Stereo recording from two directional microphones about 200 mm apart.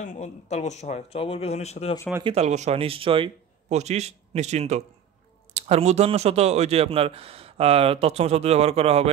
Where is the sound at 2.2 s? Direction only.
30° right (ahead or behind).